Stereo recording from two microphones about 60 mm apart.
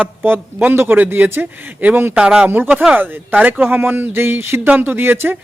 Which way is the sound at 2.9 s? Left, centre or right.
Right.